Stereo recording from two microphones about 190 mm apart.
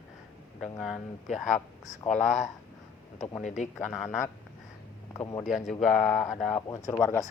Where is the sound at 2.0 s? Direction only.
40° left (ahead or behind).